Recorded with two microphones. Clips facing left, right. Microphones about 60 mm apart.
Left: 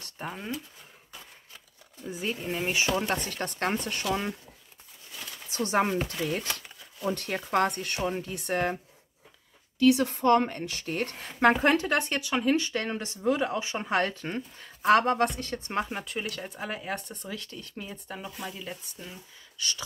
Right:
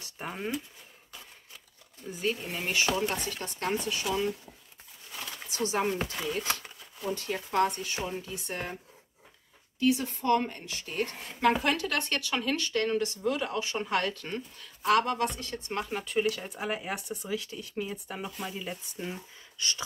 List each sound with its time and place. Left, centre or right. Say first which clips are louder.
0.0 s a sound: right 1 dB; centre
2.0 s speech: even; centre
2.7 s speech: right 1 dB; left
3.1 s speech: left 4 dB; left
5.5 s speech: left 3 dB; left
9.8 s speech: left 5 dB; left
15.9 s speech: right 5 dB; centre
16.4 s speech: right 1 dB; centre
18.9 s speech: right 6 dB; right